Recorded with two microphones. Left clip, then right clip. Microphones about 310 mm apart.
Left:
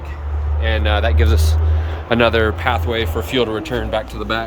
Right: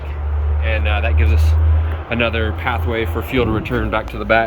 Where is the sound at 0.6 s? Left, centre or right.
Centre.